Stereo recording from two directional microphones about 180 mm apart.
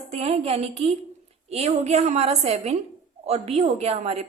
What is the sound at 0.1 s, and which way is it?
A woman's voice, 35° right (ahead or behind).